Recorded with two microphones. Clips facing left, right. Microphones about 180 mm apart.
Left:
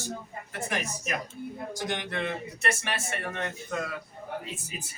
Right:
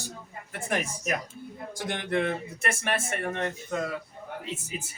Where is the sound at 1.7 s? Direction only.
50° right (ahead or behind).